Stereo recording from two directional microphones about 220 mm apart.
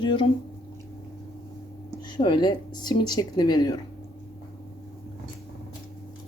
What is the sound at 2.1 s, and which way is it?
Speech, 20° left (ahead or behind).